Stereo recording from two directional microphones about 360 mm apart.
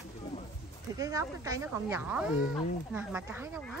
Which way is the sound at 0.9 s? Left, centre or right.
Centre.